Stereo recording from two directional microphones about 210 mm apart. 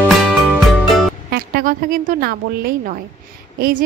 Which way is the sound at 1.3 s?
45° right (ahead or behind).